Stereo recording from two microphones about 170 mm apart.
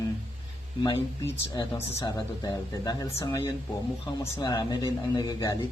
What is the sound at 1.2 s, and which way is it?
Speech, 20° left (ahead or behind).